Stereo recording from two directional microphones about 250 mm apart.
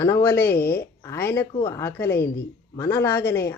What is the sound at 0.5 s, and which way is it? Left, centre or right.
Speech, left.